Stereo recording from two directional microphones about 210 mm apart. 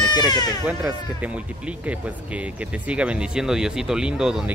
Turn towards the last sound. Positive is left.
turn(degrees=-5)  # may be behind; listen again after turning